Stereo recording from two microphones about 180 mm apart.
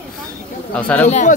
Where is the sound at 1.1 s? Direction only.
40° left (ahead or behind).